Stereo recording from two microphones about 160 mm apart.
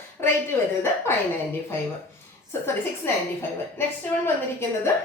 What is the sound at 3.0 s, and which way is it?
Speech, 15° left (ahead or behind).